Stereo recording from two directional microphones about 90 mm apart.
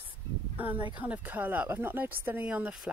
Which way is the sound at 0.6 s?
20° right (ahead or behind).